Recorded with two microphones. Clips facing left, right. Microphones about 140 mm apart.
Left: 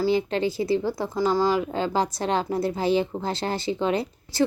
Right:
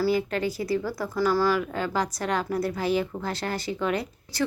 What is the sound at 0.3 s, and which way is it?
A woman's voice, 25° left (ahead or behind).